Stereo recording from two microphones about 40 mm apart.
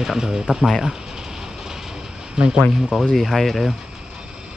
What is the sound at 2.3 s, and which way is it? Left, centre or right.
Speech, centre.